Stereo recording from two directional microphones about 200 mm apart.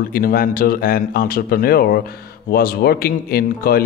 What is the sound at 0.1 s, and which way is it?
A man's voice, 45° left (ahead or behind).